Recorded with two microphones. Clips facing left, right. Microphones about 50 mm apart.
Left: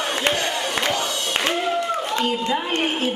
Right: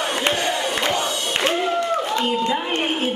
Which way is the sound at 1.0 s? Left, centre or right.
Centre.